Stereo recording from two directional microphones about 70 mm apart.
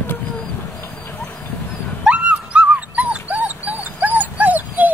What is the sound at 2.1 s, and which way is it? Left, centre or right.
Dog, centre.